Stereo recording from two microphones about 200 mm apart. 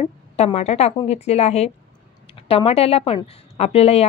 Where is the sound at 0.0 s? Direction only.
30° left (ahead or behind).